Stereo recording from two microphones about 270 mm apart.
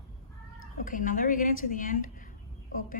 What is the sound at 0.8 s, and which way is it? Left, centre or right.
A woman's voice, left.